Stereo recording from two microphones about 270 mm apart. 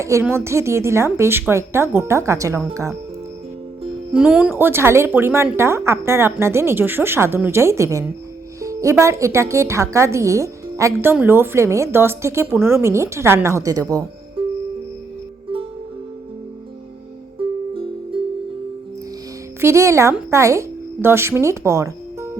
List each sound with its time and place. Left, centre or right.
0.0 s a woman's voice: centre
4.1 s a woman's voice: centre
17.7 s music: centre
19.6 s a woman's voice: centre